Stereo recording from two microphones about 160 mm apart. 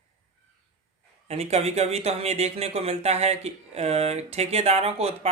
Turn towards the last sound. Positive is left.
turn(degrees=-40)  # may be behind; listen again after turning